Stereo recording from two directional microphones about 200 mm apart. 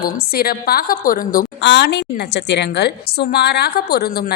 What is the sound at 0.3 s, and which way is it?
A woman's voice, 50° left (ahead or behind).